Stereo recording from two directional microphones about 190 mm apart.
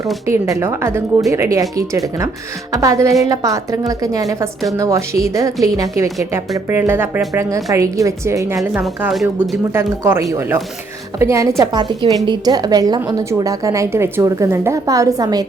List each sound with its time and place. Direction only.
0.3 s a woman's voice: 15° right (ahead or behind)
8.8 s a woman's voice: 5° right (ahead or behind); by 15.4 s 20° right (ahead or behind)